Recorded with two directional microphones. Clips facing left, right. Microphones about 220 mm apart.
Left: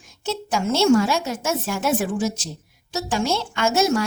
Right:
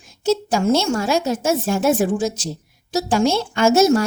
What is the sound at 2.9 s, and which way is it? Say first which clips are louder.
A woman's voice: right 5 dB; 40° right (ahead or behind).